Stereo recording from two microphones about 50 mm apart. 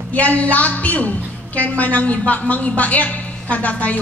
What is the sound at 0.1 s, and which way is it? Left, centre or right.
A woman's voice, left.